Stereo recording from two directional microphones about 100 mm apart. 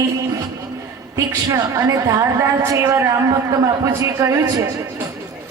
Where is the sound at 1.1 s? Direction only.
35° right (ahead or behind).